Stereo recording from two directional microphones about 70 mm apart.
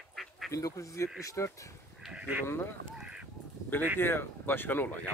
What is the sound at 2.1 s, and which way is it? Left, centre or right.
Speech, centre.